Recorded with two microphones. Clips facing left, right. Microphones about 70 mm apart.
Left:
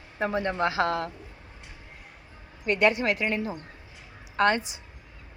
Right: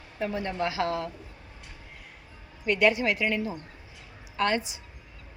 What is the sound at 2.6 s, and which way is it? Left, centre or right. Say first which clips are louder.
Speech: even; left.